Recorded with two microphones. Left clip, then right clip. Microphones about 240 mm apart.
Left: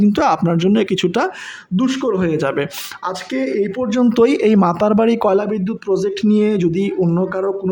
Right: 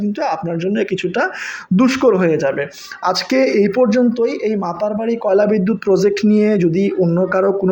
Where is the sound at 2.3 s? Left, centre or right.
Left.